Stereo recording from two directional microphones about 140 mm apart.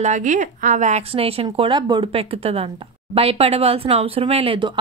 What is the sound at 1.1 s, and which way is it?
A woman's voice, 45° right (ahead or behind).